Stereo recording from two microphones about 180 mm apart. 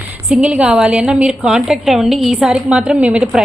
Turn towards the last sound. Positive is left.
turn(degrees=-5)  # may be behind; listen again after turning